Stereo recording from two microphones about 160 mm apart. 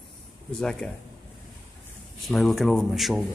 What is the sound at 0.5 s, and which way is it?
Speech, 5° left (ahead or behind).